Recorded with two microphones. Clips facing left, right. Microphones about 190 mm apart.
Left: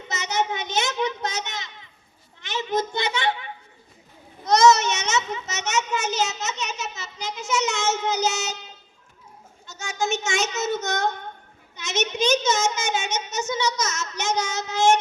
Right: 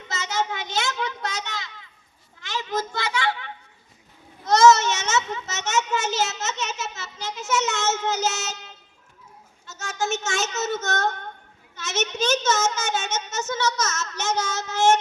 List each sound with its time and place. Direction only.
0.1 s a child's voice: 20° left (ahead or behind)
9.7 s a child's voice: 15° left (ahead or behind)